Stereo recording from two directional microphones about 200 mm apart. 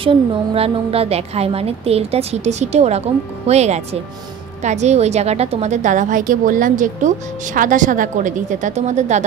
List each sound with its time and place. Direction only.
0.0 s a woman's voice: 25° right (ahead or behind)